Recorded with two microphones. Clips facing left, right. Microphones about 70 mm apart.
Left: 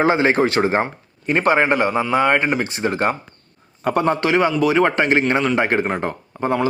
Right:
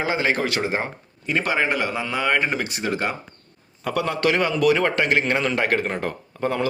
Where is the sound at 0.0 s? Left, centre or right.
Left.